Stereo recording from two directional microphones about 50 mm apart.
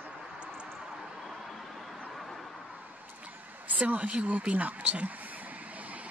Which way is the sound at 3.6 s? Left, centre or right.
Right.